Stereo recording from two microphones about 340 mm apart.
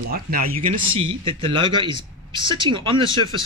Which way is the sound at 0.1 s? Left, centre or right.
Right.